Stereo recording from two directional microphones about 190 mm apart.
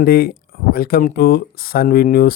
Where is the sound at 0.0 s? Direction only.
50° left (ahead or behind).